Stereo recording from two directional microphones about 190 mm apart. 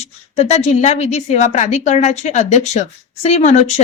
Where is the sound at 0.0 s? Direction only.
35° left (ahead or behind).